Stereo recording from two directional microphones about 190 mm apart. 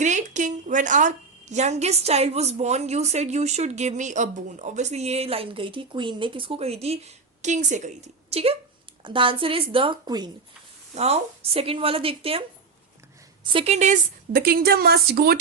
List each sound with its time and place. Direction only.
0.0 s a woman's voice: 40° right (ahead or behind); by 10.2 s 25° right (ahead or behind)
10.9 s a woman's voice: 35° right (ahead or behind); by 15.4 s 55° right (ahead or behind)